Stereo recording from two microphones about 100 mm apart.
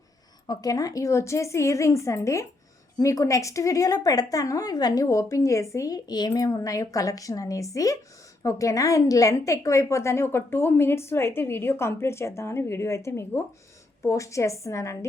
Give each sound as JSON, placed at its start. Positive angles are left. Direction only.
{"t": 0.4, "sound": "a woman's voice", "side_deg": 40}